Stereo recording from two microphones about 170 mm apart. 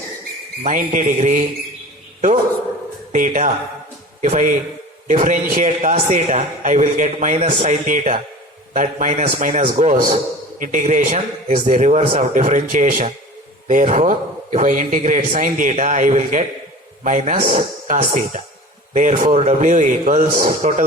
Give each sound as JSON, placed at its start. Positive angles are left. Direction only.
{"t": 0.6, "sound": "a man's voice", "side_deg": -50}
{"t": 3.1, "sound": "a man's voice", "side_deg": -50}